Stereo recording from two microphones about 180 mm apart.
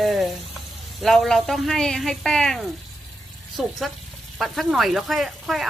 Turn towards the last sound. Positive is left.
turn(degrees=0)  # may be behind; listen again after turning